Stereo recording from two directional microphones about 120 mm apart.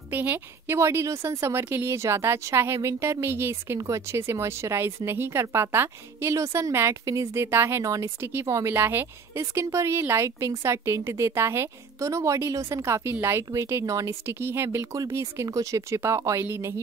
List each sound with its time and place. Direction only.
0.1 s a woman's voice: 15° right (ahead or behind)